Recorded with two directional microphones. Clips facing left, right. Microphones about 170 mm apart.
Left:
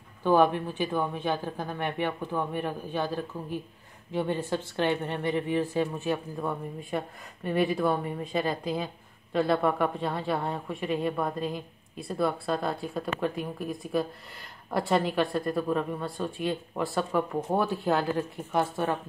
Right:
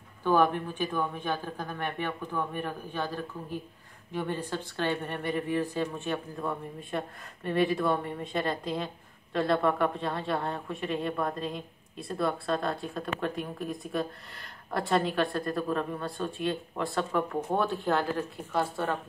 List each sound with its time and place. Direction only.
0.2 s a woman's voice: 15° left (ahead or behind)
5.7 s speech: 5° left (ahead or behind)